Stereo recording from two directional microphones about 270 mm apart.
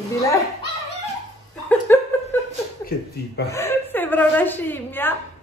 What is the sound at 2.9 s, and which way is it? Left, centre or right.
Speech, left.